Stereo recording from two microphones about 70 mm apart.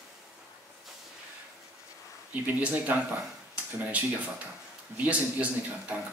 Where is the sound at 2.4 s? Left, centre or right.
Right.